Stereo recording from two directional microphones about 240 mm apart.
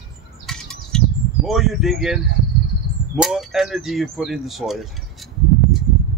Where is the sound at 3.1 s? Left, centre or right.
Centre.